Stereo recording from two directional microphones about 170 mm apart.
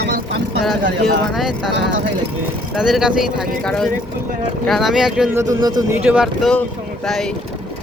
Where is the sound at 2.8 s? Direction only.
5° right (ahead or behind).